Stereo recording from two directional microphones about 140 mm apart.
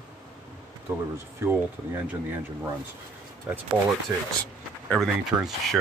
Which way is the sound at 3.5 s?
5° right (ahead or behind).